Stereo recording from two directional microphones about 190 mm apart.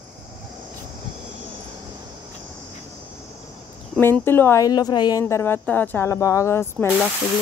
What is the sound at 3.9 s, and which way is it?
Speech, 10° left (ahead or behind).